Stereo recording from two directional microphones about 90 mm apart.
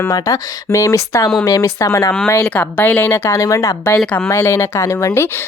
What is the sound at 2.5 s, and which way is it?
A woman's voice, 20° left (ahead or behind).